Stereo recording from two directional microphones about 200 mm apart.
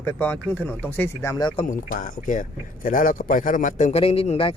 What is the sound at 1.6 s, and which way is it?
Speech, 40° left (ahead or behind).